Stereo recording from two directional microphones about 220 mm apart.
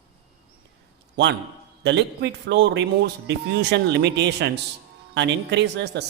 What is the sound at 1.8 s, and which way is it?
A man's voice, 50° right (ahead or behind).